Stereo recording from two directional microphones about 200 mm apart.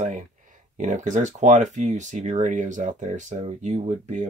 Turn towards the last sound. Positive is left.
turn(degrees=-35)  # may be behind; listen again after turning